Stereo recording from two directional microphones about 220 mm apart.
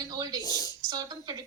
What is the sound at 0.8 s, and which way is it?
Speech, 15° right (ahead or behind).